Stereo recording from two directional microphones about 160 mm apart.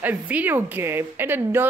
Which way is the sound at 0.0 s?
10° right (ahead or behind).